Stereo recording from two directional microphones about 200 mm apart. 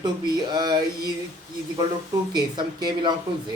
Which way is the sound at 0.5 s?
20° right (ahead or behind).